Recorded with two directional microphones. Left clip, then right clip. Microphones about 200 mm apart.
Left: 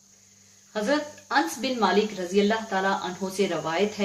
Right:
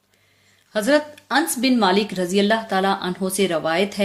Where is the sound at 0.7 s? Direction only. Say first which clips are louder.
Right 7 dB; 50° right (ahead or behind).